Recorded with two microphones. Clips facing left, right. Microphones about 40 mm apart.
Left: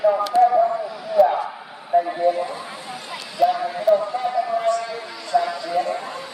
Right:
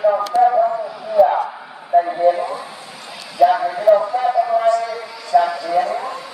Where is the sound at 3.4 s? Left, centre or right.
Centre.